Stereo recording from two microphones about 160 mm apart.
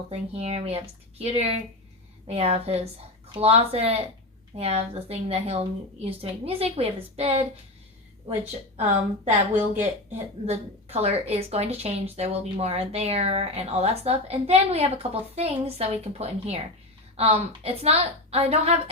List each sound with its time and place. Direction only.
0.1 s speech: 40° right (ahead or behind)
10.4 s speech: 40° right (ahead or behind)